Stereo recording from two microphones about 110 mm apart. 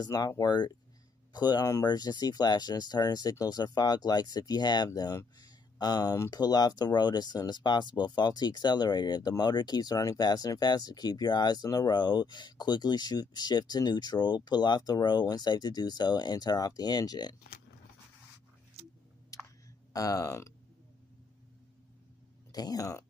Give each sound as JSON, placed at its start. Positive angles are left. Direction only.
{"t": 0.0, "sound": "speech", "side_deg": 30}
{"t": 19.3, "sound": "a sound", "side_deg": 30}
{"t": 19.9, "sound": "speech", "side_deg": 30}
{"t": 22.5, "sound": "speech", "side_deg": 35}